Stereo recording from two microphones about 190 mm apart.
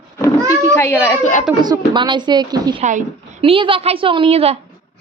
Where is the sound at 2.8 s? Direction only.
40° right (ahead or behind).